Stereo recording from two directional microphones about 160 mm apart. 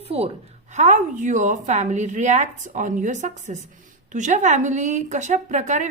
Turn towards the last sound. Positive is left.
turn(degrees=-50)  # may be behind; listen again after turning